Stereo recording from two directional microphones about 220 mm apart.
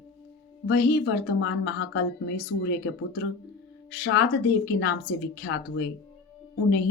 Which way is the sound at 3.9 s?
50° left (ahead or behind).